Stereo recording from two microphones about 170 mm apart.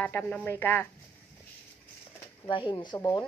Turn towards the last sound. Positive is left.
turn(degrees=20)  # may be behind; listen again after turning